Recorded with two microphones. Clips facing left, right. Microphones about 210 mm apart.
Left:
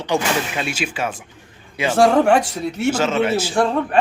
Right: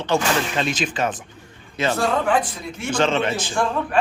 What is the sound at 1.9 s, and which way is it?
Speech, 85° left.